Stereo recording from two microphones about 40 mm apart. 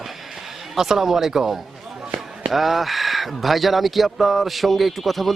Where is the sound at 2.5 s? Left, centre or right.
Centre.